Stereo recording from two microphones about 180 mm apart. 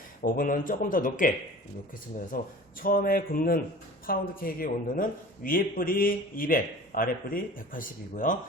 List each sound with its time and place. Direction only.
0.2 s a man's voice: 50° left (ahead or behind)
2.3 s a man's voice: 50° left (ahead or behind)